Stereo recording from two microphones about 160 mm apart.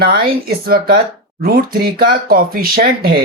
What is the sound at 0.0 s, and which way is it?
Speech, 70° right (ahead or behind).